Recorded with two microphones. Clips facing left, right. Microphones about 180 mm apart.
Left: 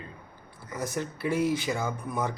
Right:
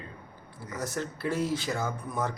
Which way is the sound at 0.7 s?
15° left (ahead or behind).